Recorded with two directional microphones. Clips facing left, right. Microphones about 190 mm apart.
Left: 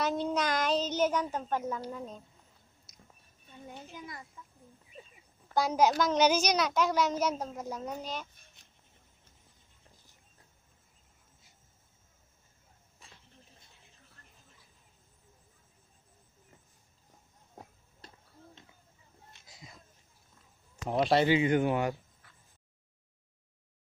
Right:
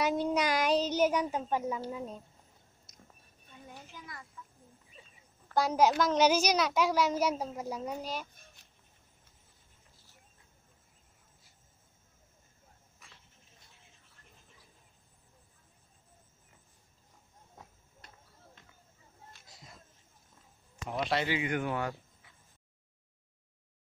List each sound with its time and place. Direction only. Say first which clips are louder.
0.0 s child singing: right 1 dB; 10° right (ahead or behind)
1.9 s a child's voice: right 1 dB; 5° right (ahead or behind)
3.7 s speech: left 4 dB; 20° left (ahead or behind)
5.5 s a child's voice: even; centre (ahead or behind)
13.0 s a sound: left 2 dB; 25° left (ahead or behind)
17.6 s a sound: left 5 dB; 30° left (ahead or behind)
20.9 s speech: left 7 dB; 35° left (ahead or behind)